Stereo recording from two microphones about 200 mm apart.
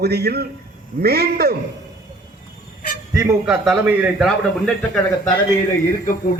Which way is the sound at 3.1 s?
15° right (ahead or behind).